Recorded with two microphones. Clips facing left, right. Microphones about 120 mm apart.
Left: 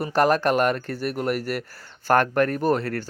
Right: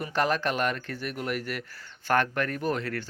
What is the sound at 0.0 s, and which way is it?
Speech, 40° left (ahead or behind).